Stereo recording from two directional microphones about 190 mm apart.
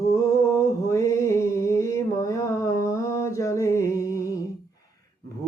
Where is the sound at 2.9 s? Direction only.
15° left (ahead or behind).